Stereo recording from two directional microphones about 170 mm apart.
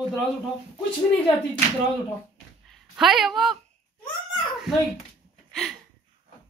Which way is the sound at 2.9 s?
Centre (ahead or behind).